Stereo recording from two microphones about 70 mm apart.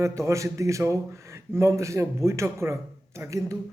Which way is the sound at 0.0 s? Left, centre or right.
Right.